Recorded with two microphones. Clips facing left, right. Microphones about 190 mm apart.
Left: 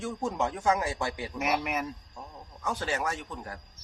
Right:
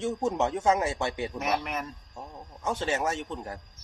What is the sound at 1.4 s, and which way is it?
Speech, 10° left (ahead or behind).